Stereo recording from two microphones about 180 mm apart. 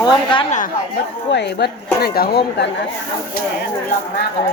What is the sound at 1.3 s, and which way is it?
Speech, 70° left (ahead or behind).